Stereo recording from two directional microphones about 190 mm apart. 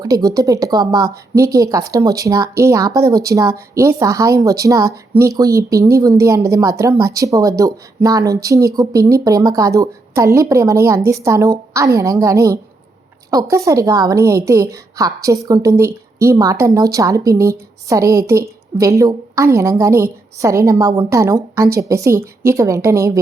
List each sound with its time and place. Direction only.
0.0 s a woman's voice: 20° right (ahead or behind)